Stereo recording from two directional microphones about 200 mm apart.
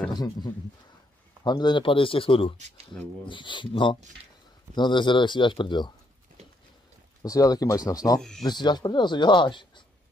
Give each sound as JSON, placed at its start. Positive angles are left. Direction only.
{"t": 0.1, "sound": "a man's voice", "side_deg": 20}
{"t": 7.2, "sound": "speech", "side_deg": 15}
{"t": 8.2, "sound": "speech", "side_deg": 0}
{"t": 8.5, "sound": "speech", "side_deg": 20}